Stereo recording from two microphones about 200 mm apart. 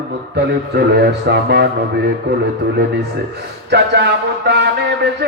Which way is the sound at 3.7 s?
55° right (ahead or behind).